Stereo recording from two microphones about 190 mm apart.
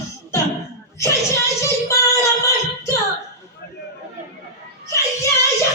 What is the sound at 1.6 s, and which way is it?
Female singing, 15° left (ahead or behind).